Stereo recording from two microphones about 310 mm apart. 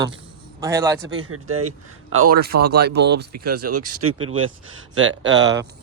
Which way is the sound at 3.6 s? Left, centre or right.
Right.